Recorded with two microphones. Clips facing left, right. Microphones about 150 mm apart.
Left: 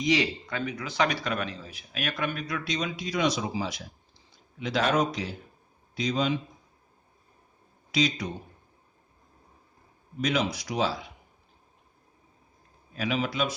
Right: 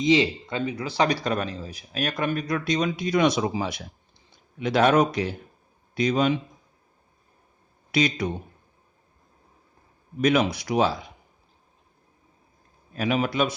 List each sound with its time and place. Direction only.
0.0 s speech: 25° right (ahead or behind); by 6.4 s 60° right (ahead or behind)
7.9 s speech: 60° right (ahead or behind)
10.2 s speech: 55° right (ahead or behind)
12.9 s speech: 50° right (ahead or behind)